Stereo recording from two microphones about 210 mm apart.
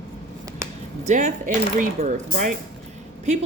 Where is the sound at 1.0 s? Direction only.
35° right (ahead or behind).